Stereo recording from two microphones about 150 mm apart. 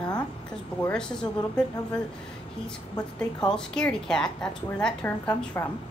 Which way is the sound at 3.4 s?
5° left (ahead or behind).